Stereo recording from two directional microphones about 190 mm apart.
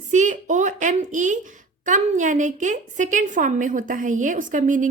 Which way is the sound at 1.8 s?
40° right (ahead or behind).